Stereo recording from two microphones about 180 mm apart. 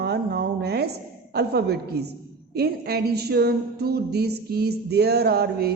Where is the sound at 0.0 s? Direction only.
65° right (ahead or behind).